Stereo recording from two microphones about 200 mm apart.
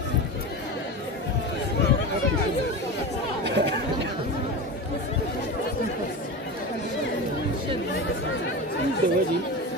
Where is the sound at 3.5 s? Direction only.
55° right (ahead or behind).